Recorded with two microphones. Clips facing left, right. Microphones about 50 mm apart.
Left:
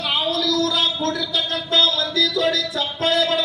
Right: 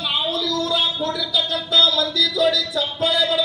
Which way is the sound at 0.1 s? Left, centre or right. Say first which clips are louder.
Left 2 dB; left.